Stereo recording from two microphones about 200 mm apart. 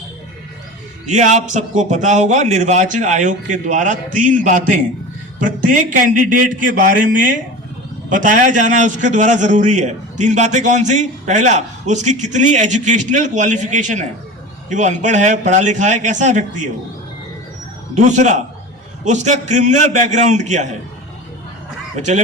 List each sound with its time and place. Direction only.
1.0 s a man's voice: 35° right (ahead or behind)
17.9 s a man's voice: 35° right (ahead or behind)
21.9 s a man's voice: 35° right (ahead or behind)